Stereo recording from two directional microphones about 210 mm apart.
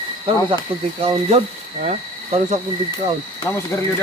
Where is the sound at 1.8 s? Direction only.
35° right (ahead or behind).